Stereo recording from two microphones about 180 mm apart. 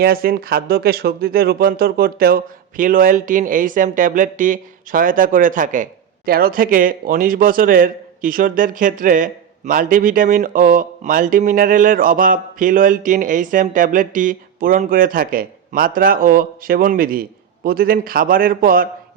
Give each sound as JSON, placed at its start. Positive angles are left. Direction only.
{"t": 0.0, "sound": "speech", "side_deg": -55}